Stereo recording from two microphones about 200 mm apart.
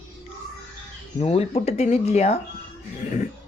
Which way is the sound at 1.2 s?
30° left (ahead or behind).